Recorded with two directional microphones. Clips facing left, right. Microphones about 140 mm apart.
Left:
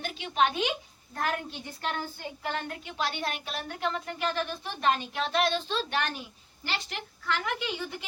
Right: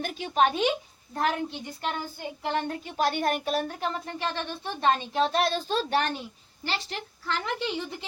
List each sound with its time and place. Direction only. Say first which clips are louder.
0.0 s speech: right 3 dB; 40° right (ahead or behind)
1.1 s a woman's voice: right 4 dB; 25° right (ahead or behind)
2.8 s speech: right 7 dB; 45° right (ahead or behind); by 7.9 s 30° right (ahead or behind)